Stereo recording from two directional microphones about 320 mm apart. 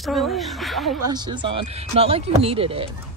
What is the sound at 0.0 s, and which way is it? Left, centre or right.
Speech, centre.